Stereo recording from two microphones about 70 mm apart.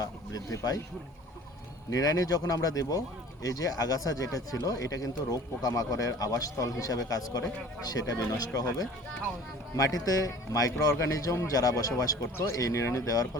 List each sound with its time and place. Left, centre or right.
0.0 s speech: left
1.9 s speech: left